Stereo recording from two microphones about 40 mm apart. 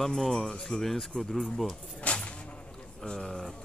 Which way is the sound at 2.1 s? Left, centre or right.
Left.